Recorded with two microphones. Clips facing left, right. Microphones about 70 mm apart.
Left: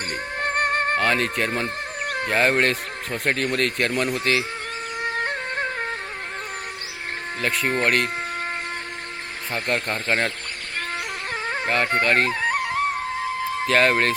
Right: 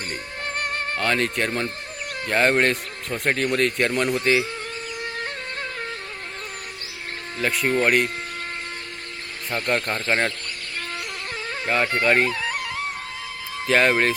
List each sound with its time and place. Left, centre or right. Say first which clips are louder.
0.1 s music: left 5 dB; left
0.9 s speech: left 1 dB; centre
1.6 s chicken: left 3 dB; left
2.3 s speech: right 1 dB; centre
5.0 s music: left 8 dB; left
7.4 s speech: right 2 dB; centre
9.6 s speech: right 1 dB; centre
11.4 s music: left 4 dB; left
12.0 s speech: right 3 dB; centre
12.3 s music: left 4 dB; left
13.7 s speech: right 1 dB; centre